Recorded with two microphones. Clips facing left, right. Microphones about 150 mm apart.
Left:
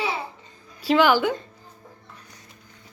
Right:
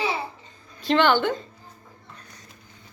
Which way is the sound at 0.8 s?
5° left (ahead or behind).